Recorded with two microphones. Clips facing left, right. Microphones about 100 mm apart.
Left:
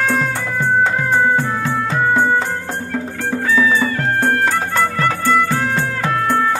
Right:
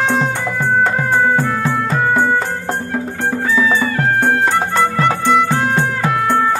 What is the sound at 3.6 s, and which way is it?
Music, 20° right (ahead or behind).